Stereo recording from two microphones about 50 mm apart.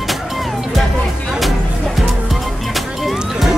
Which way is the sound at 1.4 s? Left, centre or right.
Centre.